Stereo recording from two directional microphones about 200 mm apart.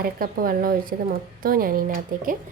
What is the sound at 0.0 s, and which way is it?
Speech, 45° right (ahead or behind).